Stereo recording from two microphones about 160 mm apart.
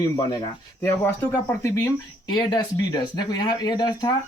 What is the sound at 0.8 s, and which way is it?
Speech, 15° left (ahead or behind).